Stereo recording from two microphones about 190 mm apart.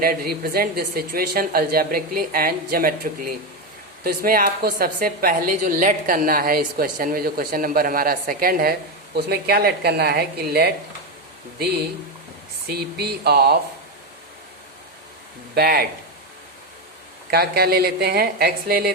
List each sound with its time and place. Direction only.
0.0 s a woman's voice: 50° right (ahead or behind)
12.6 s speech: 55° right (ahead or behind)
15.5 s speech: 55° right (ahead or behind)
17.3 s speech: 55° right (ahead or behind)